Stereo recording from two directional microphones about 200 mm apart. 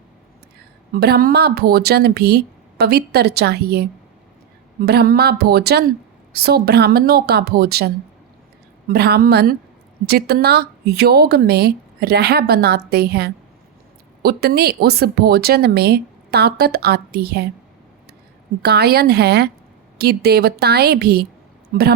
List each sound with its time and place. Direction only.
0.9 s speech: 50° right (ahead or behind)
4.9 s speech: 50° right (ahead or behind)
18.6 s speech: 55° right (ahead or behind)